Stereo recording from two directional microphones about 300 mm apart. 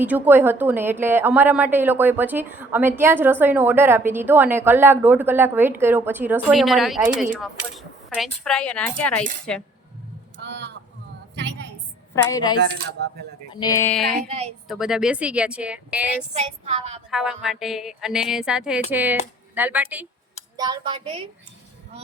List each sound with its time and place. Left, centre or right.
0.0 s a woman's voice: centre
10.3 s a sound: right
12.1 s speech: centre
16.3 s a woman's voice: right
17.1 s a woman's voice: centre